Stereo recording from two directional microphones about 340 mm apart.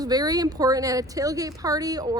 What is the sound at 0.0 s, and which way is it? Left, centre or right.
Speech, centre.